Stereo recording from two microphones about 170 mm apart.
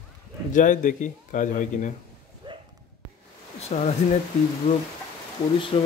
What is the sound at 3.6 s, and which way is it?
Speech, 40° left (ahead or behind).